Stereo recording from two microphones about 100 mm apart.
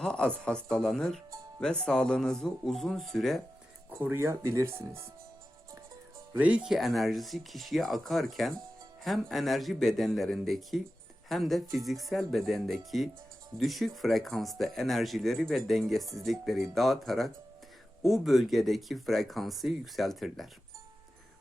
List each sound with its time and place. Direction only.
0.0 s speech: 10° left (ahead or behind)
3.8 s speech: 20° right (ahead or behind)
6.3 s speech: 15° right (ahead or behind)